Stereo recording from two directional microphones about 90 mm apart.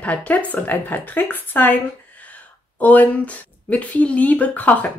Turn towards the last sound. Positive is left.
turn(degrees=15)  # may be behind; listen again after turning